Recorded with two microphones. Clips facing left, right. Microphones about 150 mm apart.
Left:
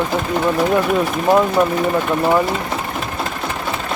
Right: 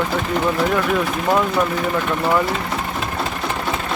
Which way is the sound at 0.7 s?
20° left (ahead or behind).